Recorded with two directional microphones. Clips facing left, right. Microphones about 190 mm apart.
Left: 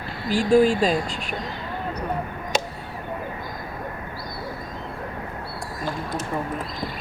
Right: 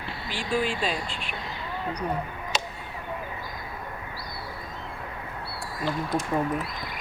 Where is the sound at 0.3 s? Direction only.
40° left (ahead or behind).